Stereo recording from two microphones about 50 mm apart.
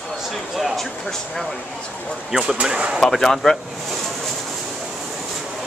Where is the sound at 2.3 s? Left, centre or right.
Centre.